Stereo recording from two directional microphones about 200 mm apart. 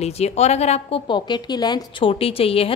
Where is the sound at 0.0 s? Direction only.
35° left (ahead or behind).